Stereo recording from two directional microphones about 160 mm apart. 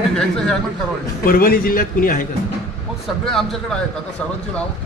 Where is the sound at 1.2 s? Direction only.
65° left (ahead or behind).